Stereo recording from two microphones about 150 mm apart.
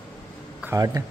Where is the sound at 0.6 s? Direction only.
20° right (ahead or behind).